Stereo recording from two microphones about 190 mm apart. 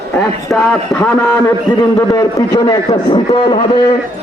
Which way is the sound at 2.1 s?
20° left (ahead or behind).